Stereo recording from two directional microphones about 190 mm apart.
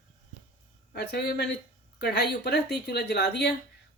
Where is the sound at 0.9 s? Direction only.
60° left (ahead or behind).